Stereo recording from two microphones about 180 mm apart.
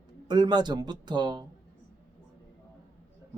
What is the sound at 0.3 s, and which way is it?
A man's voice, 25° right (ahead or behind).